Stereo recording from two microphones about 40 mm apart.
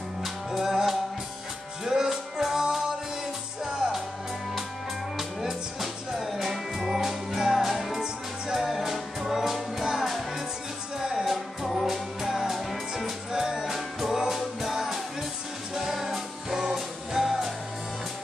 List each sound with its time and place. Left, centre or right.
0.2 s music: centre
5.1 s music: centre
8.6 s music: centre
11.0 s music: centre
11.2 s music: centre